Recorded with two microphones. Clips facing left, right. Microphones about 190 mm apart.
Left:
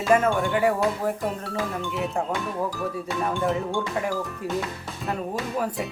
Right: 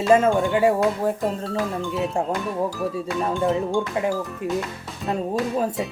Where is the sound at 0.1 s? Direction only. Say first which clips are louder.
Right 3 dB; 25° right (ahead or behind).